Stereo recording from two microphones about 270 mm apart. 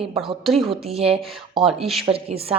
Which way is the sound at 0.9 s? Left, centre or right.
Right.